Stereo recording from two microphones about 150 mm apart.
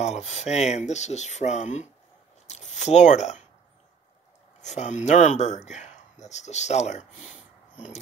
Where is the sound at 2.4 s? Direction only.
50° left (ahead or behind).